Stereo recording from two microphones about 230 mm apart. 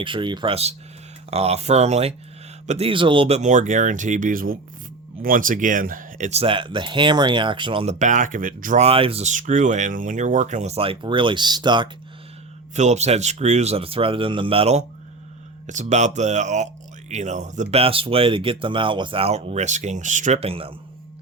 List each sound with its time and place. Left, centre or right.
0.0 s speech: right
12.7 s speech: right